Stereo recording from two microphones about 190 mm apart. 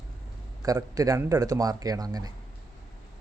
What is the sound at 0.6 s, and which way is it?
A man's voice, 20° right (ahead or behind).